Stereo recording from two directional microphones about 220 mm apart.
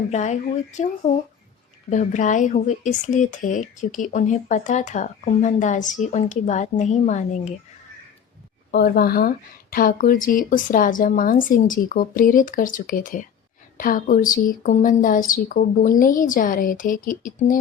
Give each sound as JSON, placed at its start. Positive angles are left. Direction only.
{"t": 0.1, "sound": "speech", "side_deg": 30}
{"t": 8.7, "sound": "speech", "side_deg": 45}